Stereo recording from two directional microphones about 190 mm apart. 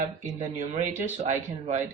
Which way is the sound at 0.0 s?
40° right (ahead or behind).